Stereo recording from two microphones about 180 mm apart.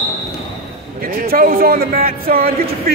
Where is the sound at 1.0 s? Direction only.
55° right (ahead or behind).